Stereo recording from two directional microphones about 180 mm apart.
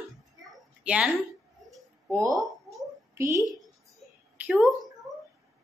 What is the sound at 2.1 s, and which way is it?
A woman's voice, 15° right (ahead or behind).